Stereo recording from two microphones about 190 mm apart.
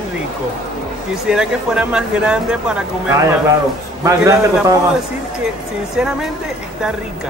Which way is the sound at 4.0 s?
15° right (ahead or behind).